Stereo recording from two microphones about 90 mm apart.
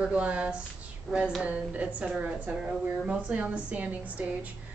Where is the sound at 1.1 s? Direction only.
5° left (ahead or behind).